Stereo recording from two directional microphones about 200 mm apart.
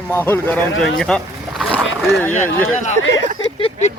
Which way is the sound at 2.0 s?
Centre (ahead or behind).